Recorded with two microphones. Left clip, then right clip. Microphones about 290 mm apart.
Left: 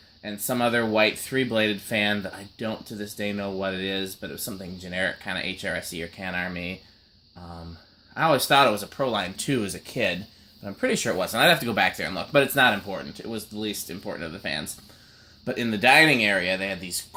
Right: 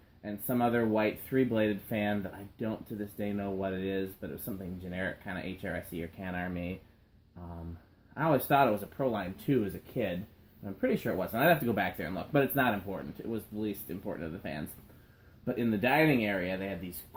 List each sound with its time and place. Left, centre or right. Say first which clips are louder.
0.2 s speech: left 6 dB; left
8.1 s speech: left 8 dB; left